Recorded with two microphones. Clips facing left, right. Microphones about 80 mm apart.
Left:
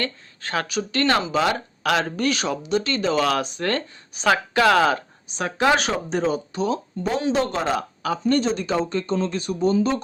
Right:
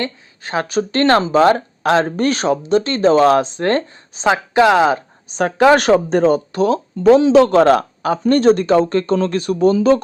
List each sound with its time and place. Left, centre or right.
0.0 s speech: right
0.7 s speech: right
5.4 s speech: right
8.0 s speech: right